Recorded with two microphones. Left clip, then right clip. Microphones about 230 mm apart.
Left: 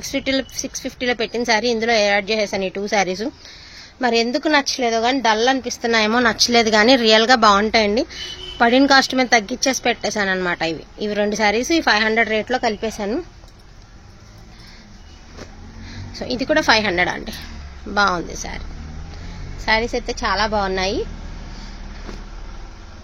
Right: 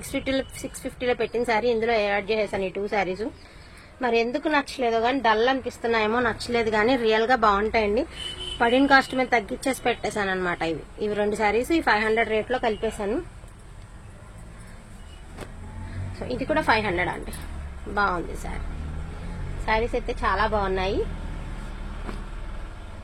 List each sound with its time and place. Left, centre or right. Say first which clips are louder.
0.1 s a woman's voice: left 5 dB; left
16.2 s a woman's voice: left 7 dB; left
19.6 s a woman's voice: left 5 dB; left